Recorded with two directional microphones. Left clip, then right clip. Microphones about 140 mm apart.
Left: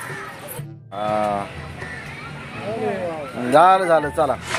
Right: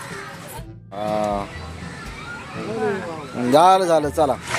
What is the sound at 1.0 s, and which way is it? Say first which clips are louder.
Speech: left 1 dB; 5° right (ahead or behind).